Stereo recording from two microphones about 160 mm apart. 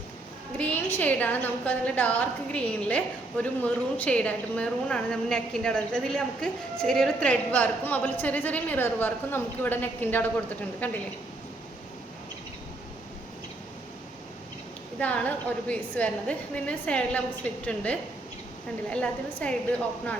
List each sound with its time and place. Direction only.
0.7 s a woman's voice: 10° left (ahead or behind)
14.9 s a woman's voice: 10° left (ahead or behind)
18.9 s a woman's voice: 5° left (ahead or behind)